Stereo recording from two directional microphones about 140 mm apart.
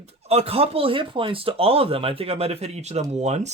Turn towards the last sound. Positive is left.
turn(degrees=-55)  # may be behind; listen again after turning